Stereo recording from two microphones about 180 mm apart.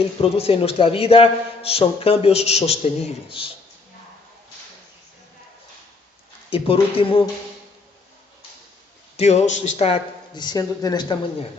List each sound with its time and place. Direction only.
0.2 s a man's voice: 35° left (ahead or behind)
6.5 s a man's voice: 30° left (ahead or behind)
9.1 s a man's voice: 40° left (ahead or behind); by 11.2 s 20° left (ahead or behind)